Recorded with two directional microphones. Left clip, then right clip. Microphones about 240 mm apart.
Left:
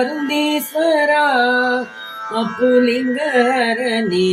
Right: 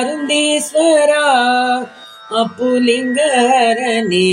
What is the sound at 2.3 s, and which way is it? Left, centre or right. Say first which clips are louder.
Music: even; centre.